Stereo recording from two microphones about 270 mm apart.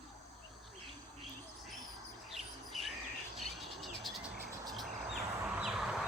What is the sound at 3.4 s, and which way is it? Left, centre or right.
Cricket, centre.